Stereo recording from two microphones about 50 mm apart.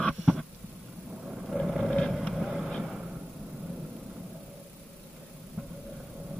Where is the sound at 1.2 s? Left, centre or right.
Centre.